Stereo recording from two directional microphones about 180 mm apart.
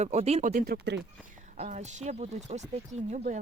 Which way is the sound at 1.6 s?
45° right (ahead or behind).